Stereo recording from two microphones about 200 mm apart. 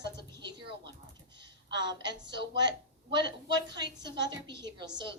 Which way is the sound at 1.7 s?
20° right (ahead or behind).